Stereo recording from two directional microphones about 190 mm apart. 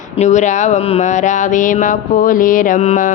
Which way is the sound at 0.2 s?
40° left (ahead or behind).